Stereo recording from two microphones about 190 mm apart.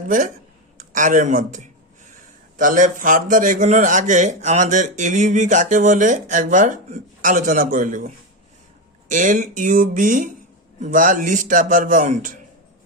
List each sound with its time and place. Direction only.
0.1 s a man's voice: 45° right (ahead or behind)